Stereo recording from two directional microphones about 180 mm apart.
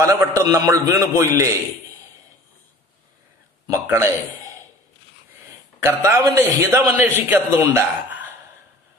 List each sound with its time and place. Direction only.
0.0 s a man's voice: 20° right (ahead or behind)
3.6 s speech: 15° right (ahead or behind)
5.9 s a man's voice: 15° right (ahead or behind)